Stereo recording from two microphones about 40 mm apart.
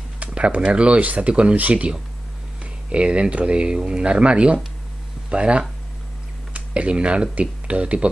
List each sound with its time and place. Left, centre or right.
0.2 s speech: right